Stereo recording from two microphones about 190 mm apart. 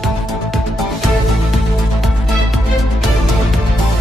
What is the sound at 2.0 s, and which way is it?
Music, centre (ahead or behind).